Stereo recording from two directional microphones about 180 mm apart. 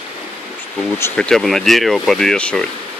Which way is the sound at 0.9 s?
10° left (ahead or behind).